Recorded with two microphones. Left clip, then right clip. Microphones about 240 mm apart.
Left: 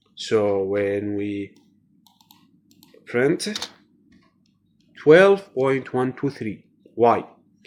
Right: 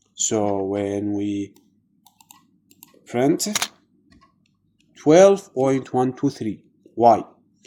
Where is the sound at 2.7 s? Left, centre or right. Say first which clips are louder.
Left 2 dB; right.